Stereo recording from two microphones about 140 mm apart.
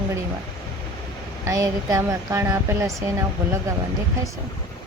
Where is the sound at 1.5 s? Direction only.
25° right (ahead or behind).